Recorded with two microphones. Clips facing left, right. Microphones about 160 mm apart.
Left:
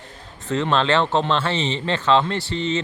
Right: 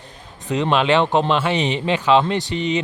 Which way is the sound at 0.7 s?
15° right (ahead or behind).